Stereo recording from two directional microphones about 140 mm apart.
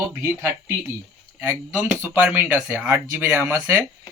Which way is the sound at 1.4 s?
15° right (ahead or behind).